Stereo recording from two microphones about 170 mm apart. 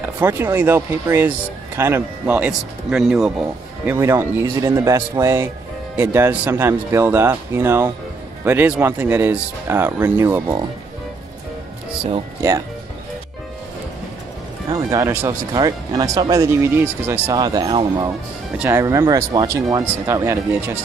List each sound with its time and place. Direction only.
0.2 s speech: 15° right (ahead or behind)
12.4 s speech: 20° right (ahead or behind)
14.7 s speech: 20° right (ahead or behind)
18.6 s speech: 15° right (ahead or behind)